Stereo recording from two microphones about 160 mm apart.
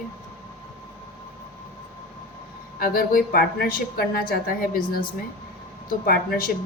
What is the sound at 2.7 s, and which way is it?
Speech, 65° left (ahead or behind).